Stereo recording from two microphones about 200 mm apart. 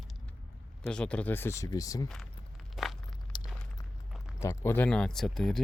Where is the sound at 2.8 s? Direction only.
Centre (ahead or behind).